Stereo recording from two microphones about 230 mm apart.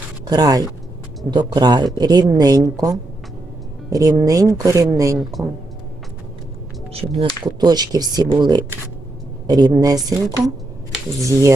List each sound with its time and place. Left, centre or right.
0.3 s speech: centre
7.4 s speech: centre